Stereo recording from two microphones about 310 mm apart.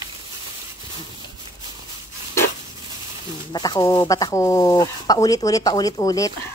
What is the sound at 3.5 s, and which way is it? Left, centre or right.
Speech, centre.